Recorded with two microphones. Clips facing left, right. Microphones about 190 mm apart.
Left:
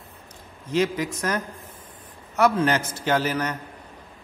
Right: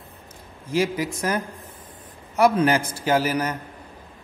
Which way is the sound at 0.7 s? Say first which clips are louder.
Even; 10° right (ahead or behind).